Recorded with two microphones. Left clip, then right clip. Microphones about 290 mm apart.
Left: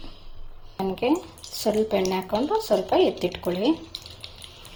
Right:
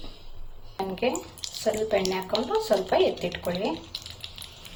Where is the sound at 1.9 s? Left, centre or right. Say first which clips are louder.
Left 1 dB; left.